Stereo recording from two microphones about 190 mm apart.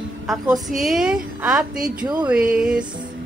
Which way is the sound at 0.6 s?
Centre (ahead or behind).